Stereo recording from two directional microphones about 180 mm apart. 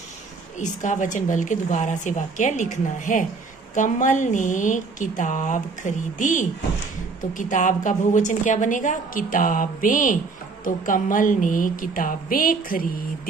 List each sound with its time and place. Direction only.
0.6 s a woman's voice: 45° left (ahead or behind)